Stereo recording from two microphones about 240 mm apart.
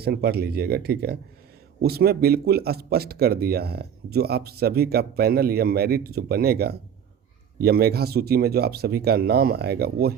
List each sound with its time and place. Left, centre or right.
0.0 s speech: right